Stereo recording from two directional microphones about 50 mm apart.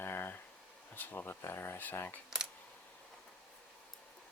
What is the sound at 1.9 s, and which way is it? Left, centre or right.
Speech, left.